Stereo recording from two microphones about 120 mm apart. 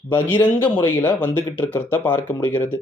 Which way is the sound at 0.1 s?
20° left (ahead or behind).